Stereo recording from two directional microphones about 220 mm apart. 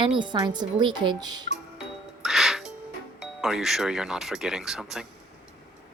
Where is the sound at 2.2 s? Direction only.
Centre (ahead or behind).